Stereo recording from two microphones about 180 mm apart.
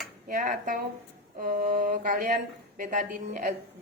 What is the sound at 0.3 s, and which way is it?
Speech, 50° right (ahead or behind).